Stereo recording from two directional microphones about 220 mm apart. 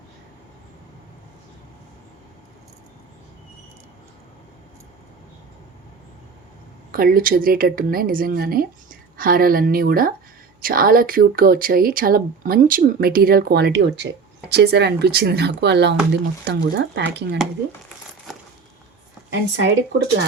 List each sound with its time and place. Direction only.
6.9 s speech: 40° right (ahead or behind)
19.3 s a woman's voice: 55° right (ahead or behind)